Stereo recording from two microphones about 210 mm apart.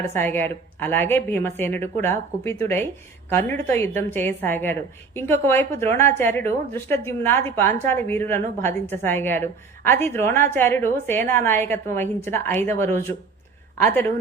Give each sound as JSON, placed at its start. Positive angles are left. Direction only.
{"t": 0.1, "sound": "a woman's voice", "side_deg": 10}